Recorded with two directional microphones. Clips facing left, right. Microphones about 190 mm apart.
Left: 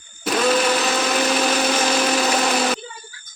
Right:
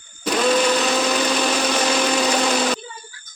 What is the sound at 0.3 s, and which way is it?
Blender, centre (ahead or behind).